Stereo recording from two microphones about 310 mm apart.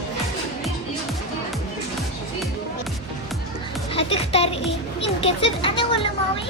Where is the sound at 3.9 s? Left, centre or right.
Centre.